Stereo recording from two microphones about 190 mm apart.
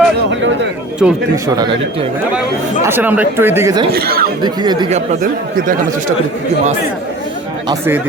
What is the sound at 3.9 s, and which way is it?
Speech, 55° right (ahead or behind).